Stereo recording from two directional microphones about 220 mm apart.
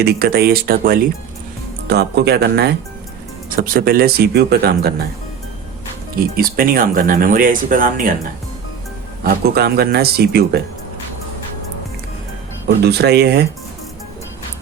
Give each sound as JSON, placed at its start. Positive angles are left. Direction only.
{"t": 0.0, "sound": "speech", "side_deg": -45}
{"t": 6.3, "sound": "speech", "side_deg": -40}
{"t": 9.2, "sound": "speech", "side_deg": -40}
{"t": 12.6, "sound": "speech", "side_deg": -45}